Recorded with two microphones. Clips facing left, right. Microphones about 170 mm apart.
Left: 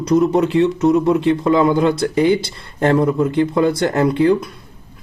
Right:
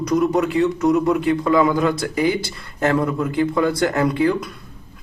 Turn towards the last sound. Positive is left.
turn(degrees=25)  # may be behind; listen again after turning